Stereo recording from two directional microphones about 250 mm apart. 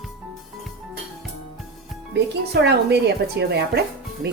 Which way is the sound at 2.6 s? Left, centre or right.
Right.